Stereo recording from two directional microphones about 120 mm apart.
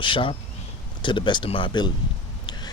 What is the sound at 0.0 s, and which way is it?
Speech, 45° left (ahead or behind).